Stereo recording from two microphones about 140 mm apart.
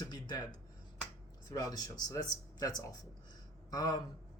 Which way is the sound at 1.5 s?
25° left (ahead or behind).